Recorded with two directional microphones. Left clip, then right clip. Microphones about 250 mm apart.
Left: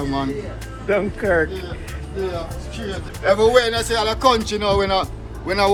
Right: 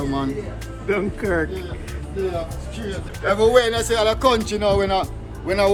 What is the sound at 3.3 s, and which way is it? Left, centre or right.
Speech, centre.